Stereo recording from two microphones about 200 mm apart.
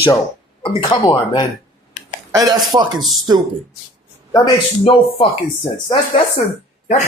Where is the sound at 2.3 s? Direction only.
15° right (ahead or behind).